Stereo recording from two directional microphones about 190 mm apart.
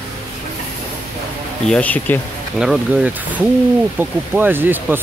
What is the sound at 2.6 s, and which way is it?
Speech, centre (ahead or behind).